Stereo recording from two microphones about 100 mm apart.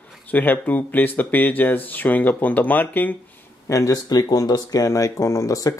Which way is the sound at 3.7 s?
35° left (ahead or behind).